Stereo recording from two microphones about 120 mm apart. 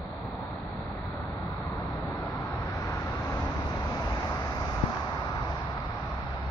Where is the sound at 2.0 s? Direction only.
20° left (ahead or behind).